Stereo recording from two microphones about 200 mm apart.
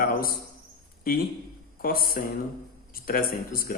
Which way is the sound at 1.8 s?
45° left (ahead or behind).